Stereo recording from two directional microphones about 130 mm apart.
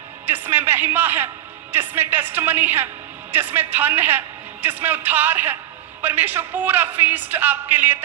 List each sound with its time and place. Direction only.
0.3 s speech: 15° right (ahead or behind)